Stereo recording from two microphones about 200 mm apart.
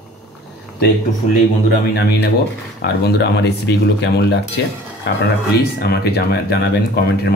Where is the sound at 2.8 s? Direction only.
60° left (ahead or behind).